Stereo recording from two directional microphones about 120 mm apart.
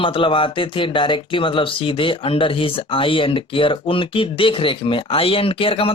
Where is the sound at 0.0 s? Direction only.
45° left (ahead or behind).